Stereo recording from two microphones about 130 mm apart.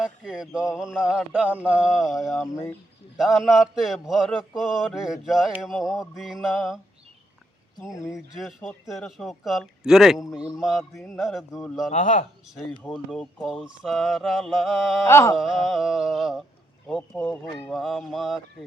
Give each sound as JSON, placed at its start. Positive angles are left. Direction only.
{"t": 0.0, "sound": "a man's voice", "side_deg": -5}
{"t": 8.0, "sound": "a man's voice", "side_deg": -5}
{"t": 11.9, "sound": "speech", "side_deg": 85}
{"t": 12.9, "sound": "a man's voice", "side_deg": 0}
{"t": 15.0, "sound": "carnatic music", "side_deg": 20}
{"t": 15.4, "sound": "a man's voice", "side_deg": 0}